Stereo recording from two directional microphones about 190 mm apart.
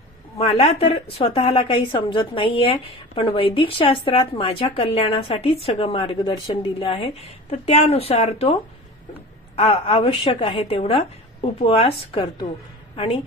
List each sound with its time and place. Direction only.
0.4 s a woman's voice: 30° left (ahead or behind)
9.6 s a woman's voice: 30° left (ahead or behind)